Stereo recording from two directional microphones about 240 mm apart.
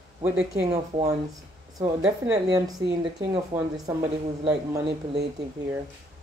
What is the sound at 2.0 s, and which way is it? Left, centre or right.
Speech, centre.